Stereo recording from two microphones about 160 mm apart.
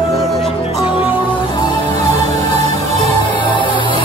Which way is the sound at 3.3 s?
30° left (ahead or behind).